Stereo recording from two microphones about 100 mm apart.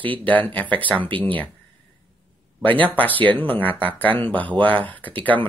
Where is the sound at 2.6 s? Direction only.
15° left (ahead or behind).